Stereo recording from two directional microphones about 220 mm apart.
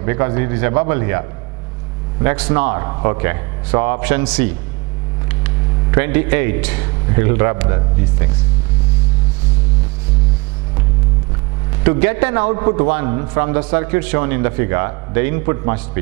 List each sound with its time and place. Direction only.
0.0 s a man's voice: 15° right (ahead or behind)
2.2 s a man's voice: 10° right (ahead or behind)
11.8 s a man's voice: 15° right (ahead or behind)
12.5 s a man's voice: 20° right (ahead or behind)